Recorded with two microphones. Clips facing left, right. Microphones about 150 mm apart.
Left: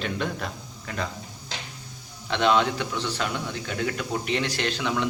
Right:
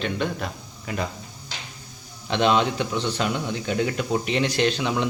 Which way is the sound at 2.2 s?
20° right (ahead or behind).